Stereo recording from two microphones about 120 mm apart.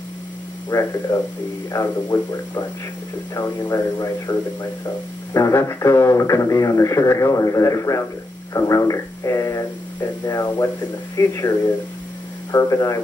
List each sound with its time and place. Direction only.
0.7 s speech: 30° left (ahead or behind)
3.7 s speech: 30° left (ahead or behind)
12.5 s speech: 25° left (ahead or behind)